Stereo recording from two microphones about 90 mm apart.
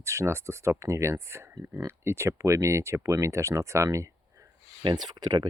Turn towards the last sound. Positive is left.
turn(degrees=-50)  # may be behind; listen again after turning